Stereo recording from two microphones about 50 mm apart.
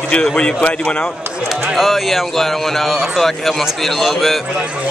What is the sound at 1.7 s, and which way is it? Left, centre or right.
Speech, centre.